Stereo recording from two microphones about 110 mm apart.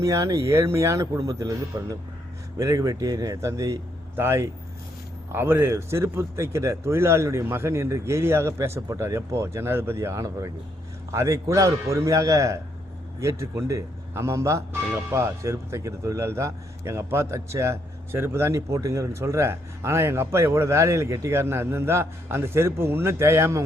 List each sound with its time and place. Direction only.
0.0 s speech: 30° right (ahead or behind)